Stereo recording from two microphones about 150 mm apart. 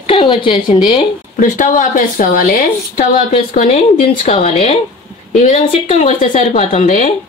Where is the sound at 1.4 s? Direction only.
60° left (ahead or behind).